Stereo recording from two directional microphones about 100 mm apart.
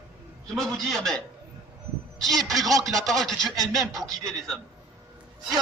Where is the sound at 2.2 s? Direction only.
Centre (ahead or behind).